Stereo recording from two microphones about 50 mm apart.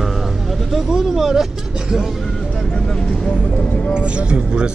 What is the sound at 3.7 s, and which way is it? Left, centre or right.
Speech, left.